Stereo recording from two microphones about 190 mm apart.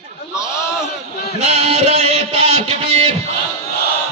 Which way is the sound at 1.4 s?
35° right (ahead or behind).